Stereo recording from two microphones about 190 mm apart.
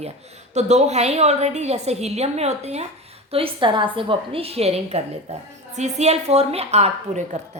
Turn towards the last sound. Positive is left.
turn(degrees=-35)  # may be behind; listen again after turning